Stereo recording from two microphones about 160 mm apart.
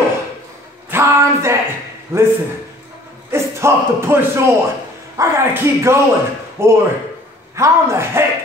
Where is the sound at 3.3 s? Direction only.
15° right (ahead or behind).